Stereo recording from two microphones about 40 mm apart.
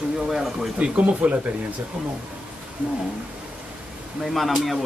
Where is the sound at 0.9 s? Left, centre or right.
Right.